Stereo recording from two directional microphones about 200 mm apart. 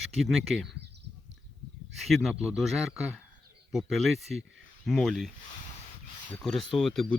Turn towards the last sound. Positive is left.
turn(degrees=0)  # may be behind; listen again after turning